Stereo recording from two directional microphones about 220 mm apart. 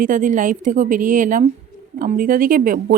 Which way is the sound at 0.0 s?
35° right (ahead or behind).